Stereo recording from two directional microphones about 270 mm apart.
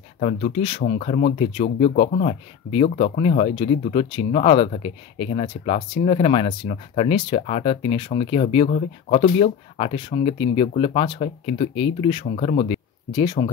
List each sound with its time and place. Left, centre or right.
0.2 s speech: left